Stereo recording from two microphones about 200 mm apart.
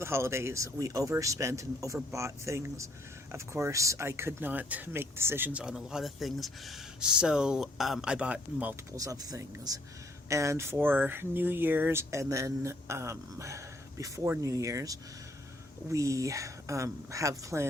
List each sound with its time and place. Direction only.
0.0 s speech: 15° right (ahead or behind)